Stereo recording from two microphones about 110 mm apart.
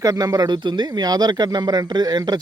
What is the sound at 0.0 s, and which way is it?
Speech, 35° right (ahead or behind).